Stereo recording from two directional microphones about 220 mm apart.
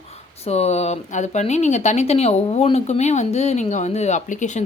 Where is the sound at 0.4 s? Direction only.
30° left (ahead or behind).